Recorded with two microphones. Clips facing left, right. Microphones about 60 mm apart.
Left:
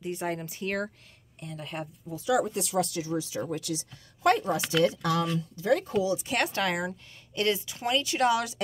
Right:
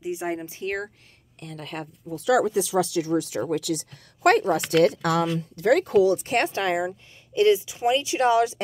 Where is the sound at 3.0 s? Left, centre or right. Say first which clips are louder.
Right 6 dB; right.